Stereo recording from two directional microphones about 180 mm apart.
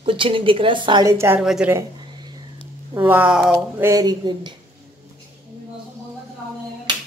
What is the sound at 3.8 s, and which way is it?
Speech, 20° right (ahead or behind).